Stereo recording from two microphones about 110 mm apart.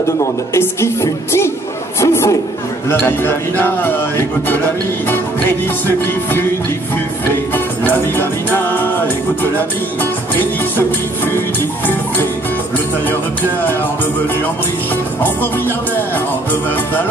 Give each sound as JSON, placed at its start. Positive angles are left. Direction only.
{"t": 0.2, "sound": "a man's voice", "side_deg": 25}
{"t": 5.0, "sound": "speech", "side_deg": 20}
{"t": 7.2, "sound": "music", "side_deg": 20}